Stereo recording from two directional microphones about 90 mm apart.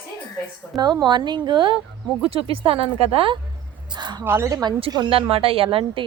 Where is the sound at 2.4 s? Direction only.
85° right.